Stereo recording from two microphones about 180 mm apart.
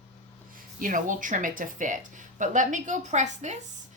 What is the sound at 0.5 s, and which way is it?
A woman's voice, 45° right (ahead or behind).